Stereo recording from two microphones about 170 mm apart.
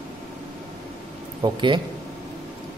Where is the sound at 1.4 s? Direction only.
30° right (ahead or behind).